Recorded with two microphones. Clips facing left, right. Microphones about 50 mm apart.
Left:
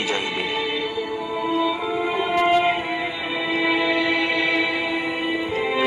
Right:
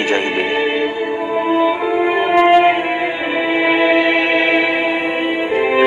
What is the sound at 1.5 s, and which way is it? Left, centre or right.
Music, right.